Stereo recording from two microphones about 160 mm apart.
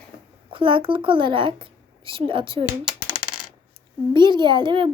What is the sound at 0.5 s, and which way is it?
A child's voice, 30° right (ahead or behind).